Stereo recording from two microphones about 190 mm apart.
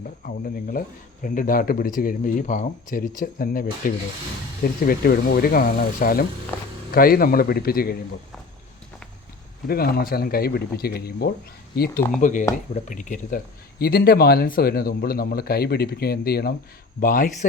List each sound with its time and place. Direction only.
0.3 s speech: 50° left (ahead or behind)
9.6 s speech: 50° left (ahead or behind)
12.2 s speech: 40° left (ahead or behind)
17.0 s speech: 45° left (ahead or behind)